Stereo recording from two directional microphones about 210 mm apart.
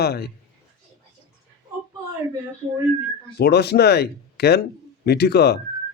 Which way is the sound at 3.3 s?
50° left (ahead or behind).